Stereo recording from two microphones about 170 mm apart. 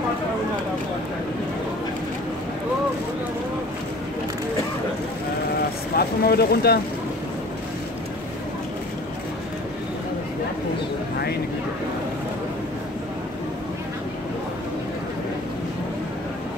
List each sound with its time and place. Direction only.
5.9 s speech: 65° left (ahead or behind)